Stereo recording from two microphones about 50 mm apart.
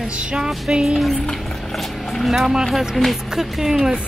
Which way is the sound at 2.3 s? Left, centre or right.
Centre.